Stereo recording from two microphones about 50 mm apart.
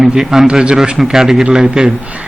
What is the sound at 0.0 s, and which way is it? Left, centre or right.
A man's voice, centre.